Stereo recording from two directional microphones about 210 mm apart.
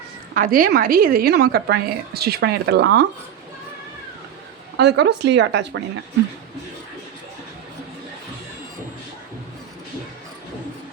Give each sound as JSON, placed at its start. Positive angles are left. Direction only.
{"t": 0.3, "sound": "a woman's voice", "side_deg": -40}
{"t": 4.8, "sound": "speech", "side_deg": -55}